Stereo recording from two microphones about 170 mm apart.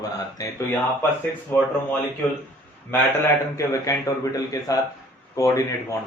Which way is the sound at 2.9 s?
10° left (ahead or behind).